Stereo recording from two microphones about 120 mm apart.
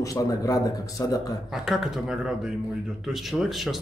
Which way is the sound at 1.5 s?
Centre (ahead or behind).